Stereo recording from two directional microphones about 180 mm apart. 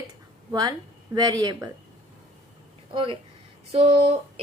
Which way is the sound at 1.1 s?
20° right (ahead or behind).